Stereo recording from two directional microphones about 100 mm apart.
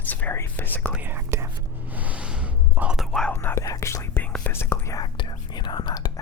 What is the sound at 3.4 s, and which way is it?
Speech, 30° left (ahead or behind).